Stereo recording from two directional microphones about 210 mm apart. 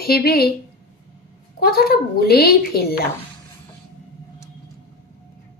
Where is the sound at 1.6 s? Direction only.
45° left (ahead or behind).